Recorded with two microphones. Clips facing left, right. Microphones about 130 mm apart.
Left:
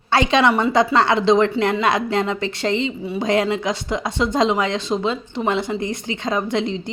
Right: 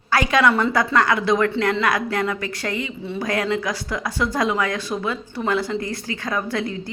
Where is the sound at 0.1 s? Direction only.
25° left (ahead or behind).